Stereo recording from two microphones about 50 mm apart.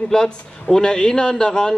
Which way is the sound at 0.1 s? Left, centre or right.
Centre.